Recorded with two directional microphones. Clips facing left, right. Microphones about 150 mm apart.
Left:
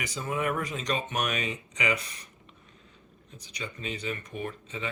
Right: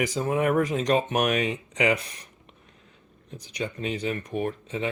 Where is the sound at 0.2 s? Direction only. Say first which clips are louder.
Right 6 dB; 50° right (ahead or behind).